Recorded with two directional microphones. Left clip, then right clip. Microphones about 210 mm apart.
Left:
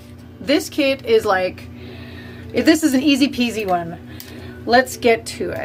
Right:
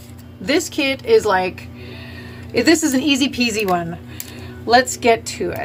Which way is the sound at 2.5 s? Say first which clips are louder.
Even; 15° left (ahead or behind).